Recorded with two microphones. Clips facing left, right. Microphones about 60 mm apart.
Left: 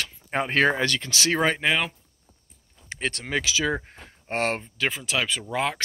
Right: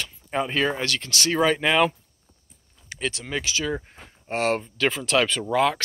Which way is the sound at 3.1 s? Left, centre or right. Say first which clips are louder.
Left 2 dB; left.